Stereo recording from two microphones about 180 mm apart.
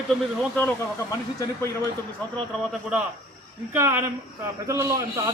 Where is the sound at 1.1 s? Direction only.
20° left (ahead or behind).